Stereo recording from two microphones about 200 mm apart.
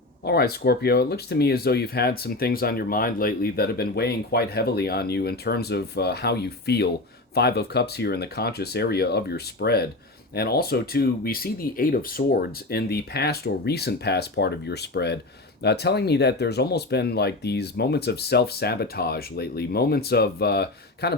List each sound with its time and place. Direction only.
0.3 s speech: 50° left (ahead or behind)